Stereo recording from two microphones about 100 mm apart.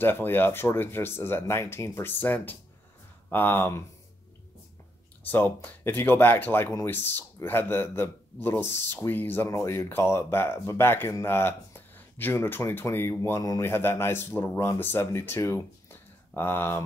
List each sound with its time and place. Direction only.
0.0 s speech: 20° left (ahead or behind)
5.2 s speech: 20° left (ahead or behind)
13.4 s a man's voice: 35° left (ahead or behind)
13.7 s speech: 25° left (ahead or behind)